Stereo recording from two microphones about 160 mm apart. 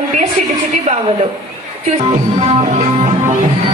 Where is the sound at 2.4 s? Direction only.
40° right (ahead or behind).